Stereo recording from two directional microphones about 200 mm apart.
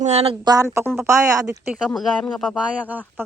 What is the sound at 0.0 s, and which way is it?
Speech, 30° right (ahead or behind).